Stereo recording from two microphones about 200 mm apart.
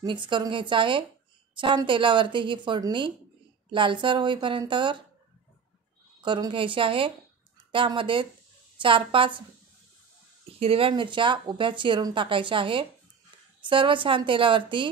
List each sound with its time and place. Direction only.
0.0 s speech: 25° right (ahead or behind)
6.2 s speech: 25° right (ahead or behind)
10.6 s speech: 30° right (ahead or behind)